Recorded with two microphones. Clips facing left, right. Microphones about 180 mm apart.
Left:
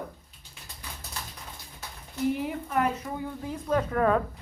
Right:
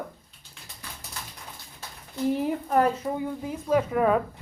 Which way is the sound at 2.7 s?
35° right (ahead or behind).